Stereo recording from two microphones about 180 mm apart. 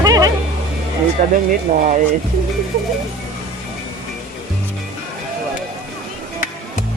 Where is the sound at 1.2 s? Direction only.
45° right (ahead or behind).